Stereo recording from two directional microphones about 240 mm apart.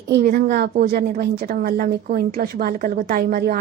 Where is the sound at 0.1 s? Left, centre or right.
Right.